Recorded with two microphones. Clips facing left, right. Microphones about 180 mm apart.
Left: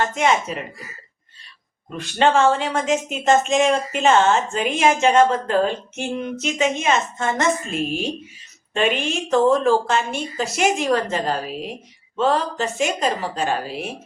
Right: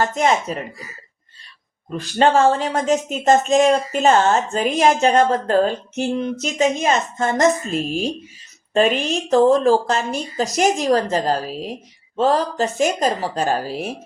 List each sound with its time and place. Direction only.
0.0 s speech: 35° right (ahead or behind)
2.0 s speech: 40° right (ahead or behind)
9.0 s speech: 35° right (ahead or behind)